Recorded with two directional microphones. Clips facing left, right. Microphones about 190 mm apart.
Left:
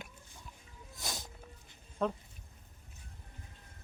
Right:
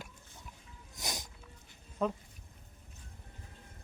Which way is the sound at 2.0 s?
5° right (ahead or behind).